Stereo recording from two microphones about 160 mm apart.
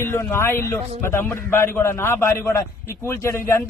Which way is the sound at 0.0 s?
15° left (ahead or behind).